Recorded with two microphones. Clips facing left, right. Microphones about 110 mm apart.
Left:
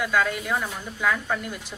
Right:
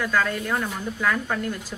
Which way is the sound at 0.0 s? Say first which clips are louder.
Even; 10° left (ahead or behind).